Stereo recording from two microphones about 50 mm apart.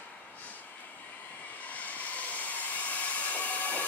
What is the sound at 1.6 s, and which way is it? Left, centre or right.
Train, left.